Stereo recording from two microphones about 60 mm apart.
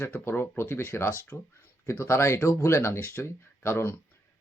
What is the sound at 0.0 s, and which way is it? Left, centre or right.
Speech, left.